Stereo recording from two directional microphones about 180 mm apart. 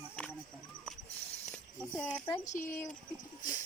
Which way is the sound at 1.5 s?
5° left (ahead or behind).